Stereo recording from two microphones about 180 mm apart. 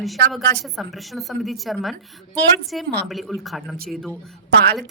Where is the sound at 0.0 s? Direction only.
Centre (ahead or behind).